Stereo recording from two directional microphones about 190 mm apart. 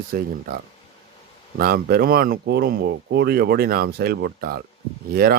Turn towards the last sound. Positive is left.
turn(degrees=-55)  # may be behind; listen again after turning